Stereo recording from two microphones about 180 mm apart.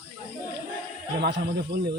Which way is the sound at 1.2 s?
65° right (ahead or behind).